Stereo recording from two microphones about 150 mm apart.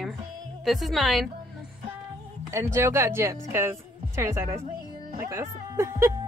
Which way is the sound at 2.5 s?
20° right (ahead or behind).